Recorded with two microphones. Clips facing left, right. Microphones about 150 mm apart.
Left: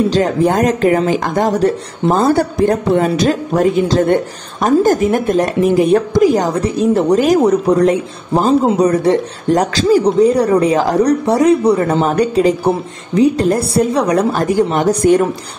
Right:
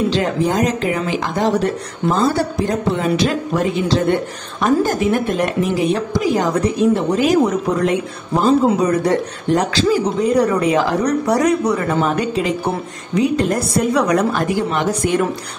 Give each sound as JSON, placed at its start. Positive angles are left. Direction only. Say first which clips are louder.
{"t": 0.5, "sound": "speech", "louder": "left 5 dB", "side_deg": 50}
{"t": 6.5, "sound": "speech", "louder": "left 2 dB", "side_deg": 30}
{"t": 9.6, "sound": "speech", "louder": "left 5 dB", "side_deg": 40}